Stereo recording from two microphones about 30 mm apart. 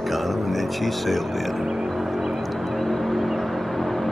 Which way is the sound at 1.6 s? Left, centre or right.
Centre.